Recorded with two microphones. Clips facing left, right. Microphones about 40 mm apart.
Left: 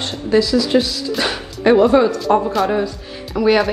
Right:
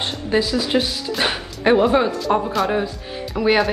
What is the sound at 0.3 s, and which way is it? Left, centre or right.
Speech, right.